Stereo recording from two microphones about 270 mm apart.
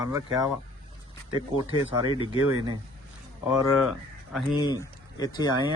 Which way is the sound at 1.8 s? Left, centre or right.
Centre.